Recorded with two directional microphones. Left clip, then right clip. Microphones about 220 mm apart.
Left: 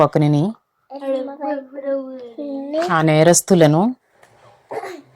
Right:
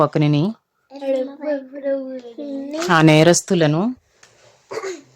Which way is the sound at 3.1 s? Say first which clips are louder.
Even; 5° right (ahead or behind).